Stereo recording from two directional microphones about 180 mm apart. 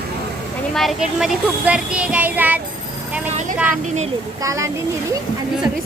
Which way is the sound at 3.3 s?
40° right (ahead or behind).